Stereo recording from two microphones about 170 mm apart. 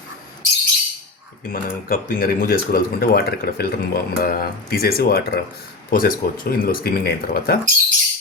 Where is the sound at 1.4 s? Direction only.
55° left (ahead or behind).